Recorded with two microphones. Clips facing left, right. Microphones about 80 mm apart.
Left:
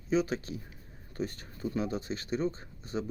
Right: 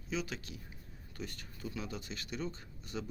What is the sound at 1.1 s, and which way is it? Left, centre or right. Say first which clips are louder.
Speech: left 9 dB; left.